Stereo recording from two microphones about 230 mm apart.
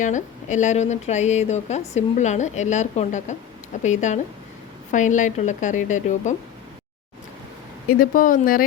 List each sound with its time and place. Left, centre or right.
0.0 s a woman's voice: left
7.9 s a woman's voice: left